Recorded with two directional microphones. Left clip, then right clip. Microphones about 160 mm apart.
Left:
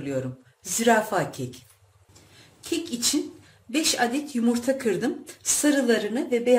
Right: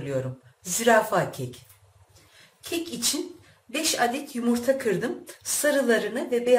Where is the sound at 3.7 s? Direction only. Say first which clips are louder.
Left 1 dB; 55° left (ahead or behind).